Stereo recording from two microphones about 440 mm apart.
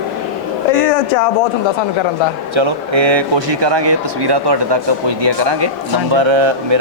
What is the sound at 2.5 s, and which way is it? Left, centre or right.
Speech, right.